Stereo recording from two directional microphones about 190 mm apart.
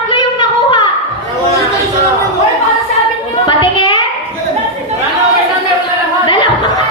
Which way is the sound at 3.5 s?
25° left (ahead or behind).